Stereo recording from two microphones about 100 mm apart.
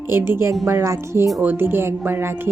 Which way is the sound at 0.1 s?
20° right (ahead or behind).